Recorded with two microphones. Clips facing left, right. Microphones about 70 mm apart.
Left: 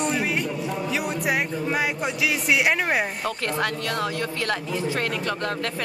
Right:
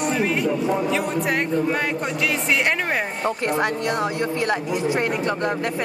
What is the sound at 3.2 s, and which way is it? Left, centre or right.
A woman's voice, right.